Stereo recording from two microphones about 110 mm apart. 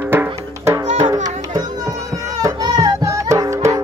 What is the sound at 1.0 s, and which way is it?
Music, 35° right (ahead or behind).